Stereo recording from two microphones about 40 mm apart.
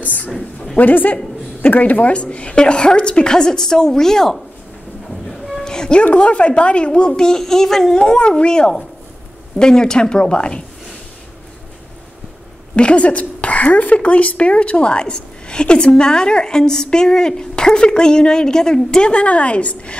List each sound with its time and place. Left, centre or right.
0.0 s a sound: left
0.7 s a woman's voice: left; by 4.4 s centre
5.6 s music: centre
6.1 s a woman's voice: left; by 8.0 s centre
8.0 s a woman's voice: centre
12.7 s a woman's voice: left
19.1 s a woman's voice: left